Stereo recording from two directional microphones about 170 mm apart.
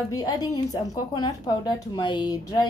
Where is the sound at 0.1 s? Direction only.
20° left (ahead or behind).